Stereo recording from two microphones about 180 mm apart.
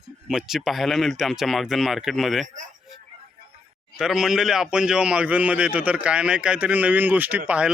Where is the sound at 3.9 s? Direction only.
5° right (ahead or behind).